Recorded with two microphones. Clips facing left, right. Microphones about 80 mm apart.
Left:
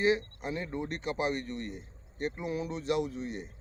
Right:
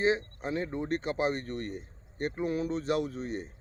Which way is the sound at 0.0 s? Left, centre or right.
Right.